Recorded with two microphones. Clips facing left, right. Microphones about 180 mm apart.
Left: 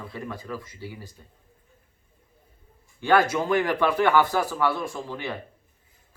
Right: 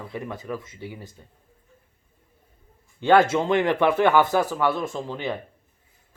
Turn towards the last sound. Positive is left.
turn(degrees=-20)  # may be behind; listen again after turning